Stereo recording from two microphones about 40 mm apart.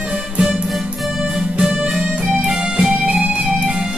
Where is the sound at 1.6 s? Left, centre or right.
Centre.